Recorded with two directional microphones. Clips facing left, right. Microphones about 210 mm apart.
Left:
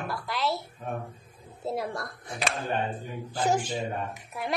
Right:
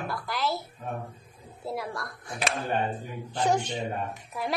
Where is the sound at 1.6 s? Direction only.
25° left (ahead or behind).